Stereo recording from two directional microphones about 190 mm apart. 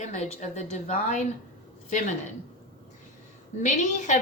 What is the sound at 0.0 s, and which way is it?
A woman's voice, 40° left (ahead or behind).